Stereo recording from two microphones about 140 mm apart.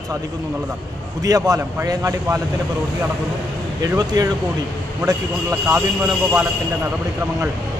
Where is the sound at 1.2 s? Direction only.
25° right (ahead or behind).